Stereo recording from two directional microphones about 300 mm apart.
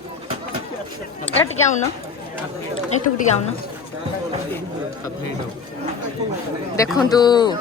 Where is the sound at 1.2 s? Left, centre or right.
Left.